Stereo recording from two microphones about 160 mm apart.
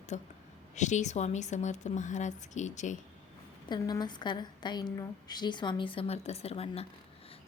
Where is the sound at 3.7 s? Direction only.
25° left (ahead or behind).